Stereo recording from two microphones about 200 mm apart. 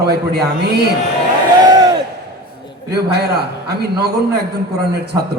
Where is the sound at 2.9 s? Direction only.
55° right (ahead or behind).